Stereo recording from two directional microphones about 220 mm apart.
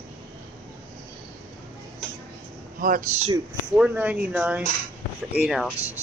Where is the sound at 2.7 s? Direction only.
40° right (ahead or behind).